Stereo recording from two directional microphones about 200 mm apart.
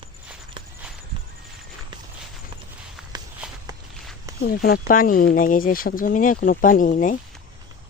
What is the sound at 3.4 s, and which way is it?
Walk, 5° right (ahead or behind).